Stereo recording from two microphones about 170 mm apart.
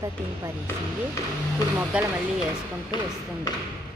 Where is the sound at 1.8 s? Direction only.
10° right (ahead or behind).